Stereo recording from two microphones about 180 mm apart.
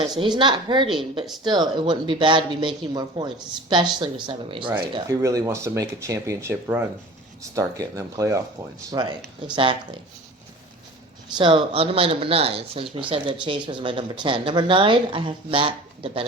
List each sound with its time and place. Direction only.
0.0 s speech: 25° right (ahead or behind)
5.0 s speech: 20° right (ahead or behind)
11.3 s speech: 30° right (ahead or behind)